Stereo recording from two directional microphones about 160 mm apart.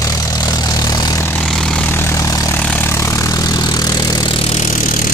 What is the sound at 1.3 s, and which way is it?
Vehicle, 5° left (ahead or behind).